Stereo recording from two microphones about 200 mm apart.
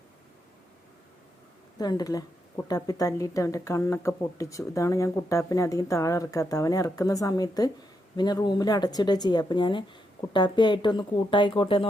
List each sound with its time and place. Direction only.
1.8 s speech: 20° left (ahead or behind)